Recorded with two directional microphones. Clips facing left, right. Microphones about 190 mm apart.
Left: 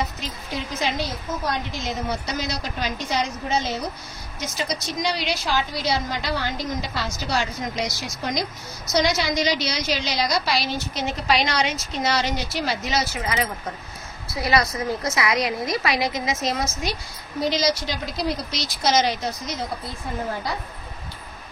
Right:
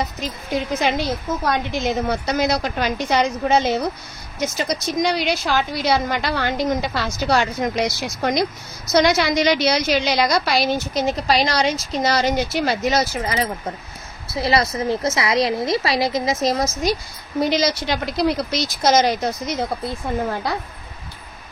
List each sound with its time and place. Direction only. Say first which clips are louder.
0.0 s a woman's voice: right 3 dB; 55° right (ahead or behind)
4.4 s a woman's voice: right 5 dB; 50° right (ahead or behind)
14.3 s a woman's voice: right 3 dB; 25° right (ahead or behind)
17.5 s a woman's voice: right 1 dB; 60° right (ahead or behind)